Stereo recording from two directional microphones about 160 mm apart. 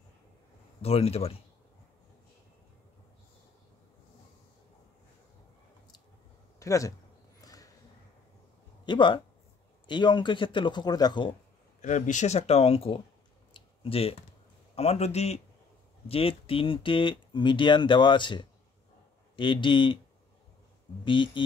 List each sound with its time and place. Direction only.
0.8 s speech: 40° left (ahead or behind)
6.6 s speech: 20° left (ahead or behind)
7.4 s a sound: 20° left (ahead or behind)
8.8 s speech: 30° left (ahead or behind)
11.8 s speech: 50° left (ahead or behind)
13.5 s a sound: 35° left (ahead or behind)
14.8 s speech: 40° left (ahead or behind)
21.0 s speech: 30° left (ahead or behind)